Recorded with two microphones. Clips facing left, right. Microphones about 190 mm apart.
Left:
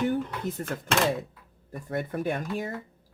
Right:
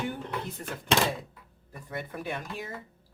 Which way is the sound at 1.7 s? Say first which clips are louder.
Left 6 dB; 45° left (ahead or behind).